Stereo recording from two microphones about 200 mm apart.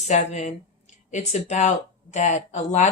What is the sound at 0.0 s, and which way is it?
Speech, 35° left (ahead or behind).